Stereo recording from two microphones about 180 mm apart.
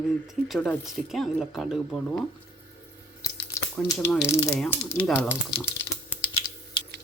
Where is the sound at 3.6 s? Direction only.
15° left (ahead or behind).